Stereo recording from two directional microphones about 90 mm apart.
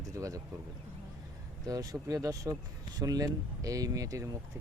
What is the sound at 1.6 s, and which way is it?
Speech, 40° right (ahead or behind).